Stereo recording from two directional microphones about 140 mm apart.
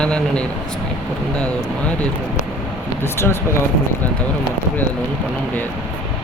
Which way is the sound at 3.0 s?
15° left (ahead or behind).